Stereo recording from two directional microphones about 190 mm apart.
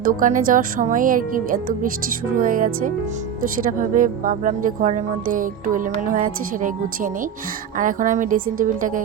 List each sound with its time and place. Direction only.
0.0 s speech: 45° right (ahead or behind)